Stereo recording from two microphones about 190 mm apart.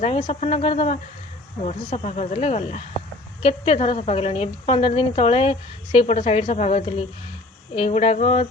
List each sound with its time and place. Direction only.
0.0 s a woman's voice: 35° left (ahead or behind)